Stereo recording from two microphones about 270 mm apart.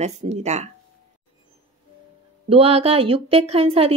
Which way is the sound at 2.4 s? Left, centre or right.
Right.